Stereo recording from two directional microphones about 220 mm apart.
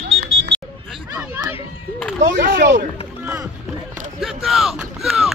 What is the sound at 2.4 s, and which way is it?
Speech, 50° right (ahead or behind).